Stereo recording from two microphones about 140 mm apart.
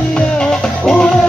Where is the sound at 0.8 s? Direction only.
5° left (ahead or behind).